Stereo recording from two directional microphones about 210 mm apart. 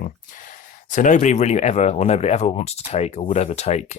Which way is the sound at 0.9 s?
35° left (ahead or behind).